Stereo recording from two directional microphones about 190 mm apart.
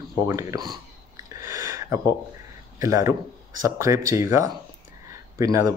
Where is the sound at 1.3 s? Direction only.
15° right (ahead or behind).